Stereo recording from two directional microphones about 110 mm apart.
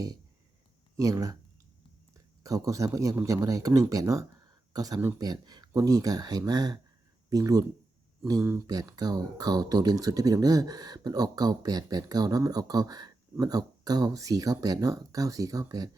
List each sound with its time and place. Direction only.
0.9 s speech: 30° right (ahead or behind)
2.4 s a man's voice: 30° right (ahead or behind)
8.6 s speech: 35° right (ahead or behind)